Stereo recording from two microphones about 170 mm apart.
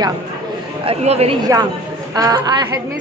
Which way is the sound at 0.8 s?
35° right (ahead or behind).